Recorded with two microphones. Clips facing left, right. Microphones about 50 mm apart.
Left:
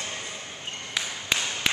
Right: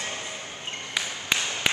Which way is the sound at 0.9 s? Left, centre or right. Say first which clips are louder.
Right 1 dB; centre.